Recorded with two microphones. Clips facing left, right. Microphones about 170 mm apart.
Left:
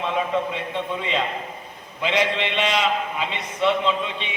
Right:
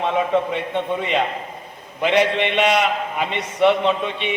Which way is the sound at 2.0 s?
55° right (ahead or behind).